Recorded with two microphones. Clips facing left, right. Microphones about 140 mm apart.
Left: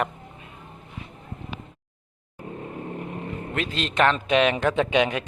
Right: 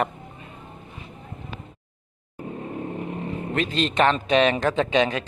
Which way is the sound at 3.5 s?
5° left (ahead or behind).